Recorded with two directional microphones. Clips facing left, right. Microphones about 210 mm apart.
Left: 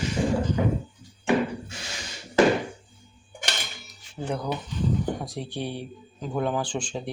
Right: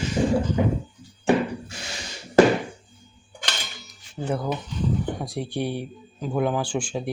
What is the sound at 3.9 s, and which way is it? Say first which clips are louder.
Music: right 3 dB; 5° right (ahead or behind).